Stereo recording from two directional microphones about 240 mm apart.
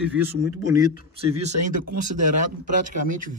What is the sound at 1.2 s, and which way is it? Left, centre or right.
Speech, right.